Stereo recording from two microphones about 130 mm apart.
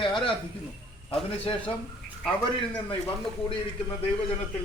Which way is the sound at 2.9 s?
40° left (ahead or behind).